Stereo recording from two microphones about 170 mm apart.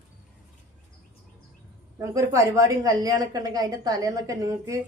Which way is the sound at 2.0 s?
20° right (ahead or behind).